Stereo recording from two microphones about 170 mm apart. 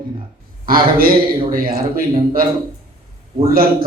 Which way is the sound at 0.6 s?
60° right (ahead or behind).